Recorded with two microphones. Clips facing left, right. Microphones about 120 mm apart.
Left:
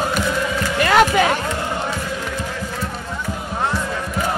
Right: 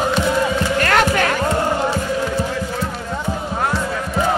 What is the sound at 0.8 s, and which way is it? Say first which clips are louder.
Music: left 4 dB; 10° left (ahead or behind).